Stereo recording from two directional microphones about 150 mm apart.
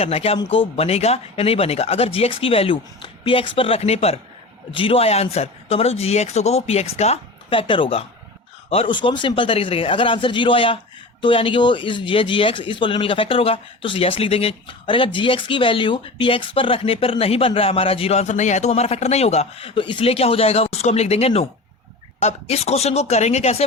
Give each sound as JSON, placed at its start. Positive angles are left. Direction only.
{"t": 0.0, "sound": "speech", "side_deg": 40}